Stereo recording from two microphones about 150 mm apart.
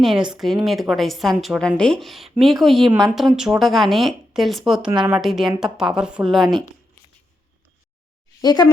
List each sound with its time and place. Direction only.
0.0 s a woman's voice: 5° right (ahead or behind)
8.4 s speech: 25° left (ahead or behind)